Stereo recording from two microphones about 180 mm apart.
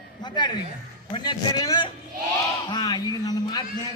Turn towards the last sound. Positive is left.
turn(degrees=20)  # may be behind; listen again after turning